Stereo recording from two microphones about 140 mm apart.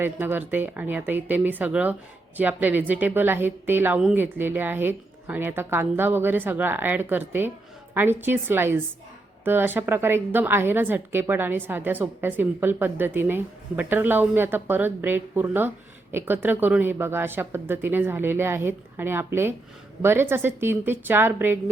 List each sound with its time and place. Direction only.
0.0 s a woman's voice: 15° right (ahead or behind)